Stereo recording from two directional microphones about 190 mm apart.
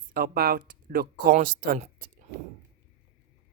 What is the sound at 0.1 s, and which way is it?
Speech, 50° right (ahead or behind).